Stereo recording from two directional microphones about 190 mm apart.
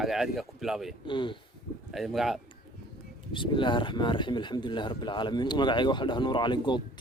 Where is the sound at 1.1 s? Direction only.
25° left (ahead or behind).